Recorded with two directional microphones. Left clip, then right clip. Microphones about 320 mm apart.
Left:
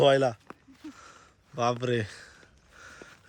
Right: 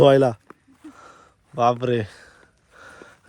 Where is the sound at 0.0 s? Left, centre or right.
Centre.